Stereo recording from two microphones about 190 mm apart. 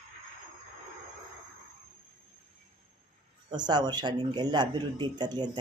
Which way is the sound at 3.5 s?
20° right (ahead or behind).